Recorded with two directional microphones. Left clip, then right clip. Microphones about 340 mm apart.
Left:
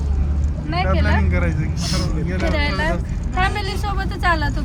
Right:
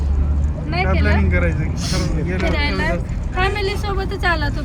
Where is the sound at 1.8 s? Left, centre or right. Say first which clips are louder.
Right 1 dB; left.